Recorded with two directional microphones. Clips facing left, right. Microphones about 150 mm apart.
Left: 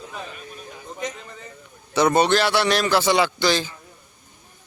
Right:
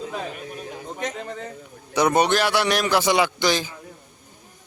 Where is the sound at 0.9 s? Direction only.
70° right (ahead or behind).